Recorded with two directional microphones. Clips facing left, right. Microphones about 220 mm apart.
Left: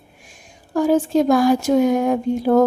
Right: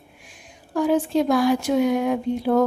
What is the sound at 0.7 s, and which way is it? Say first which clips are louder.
Speech: left 4 dB; 45° left (ahead or behind).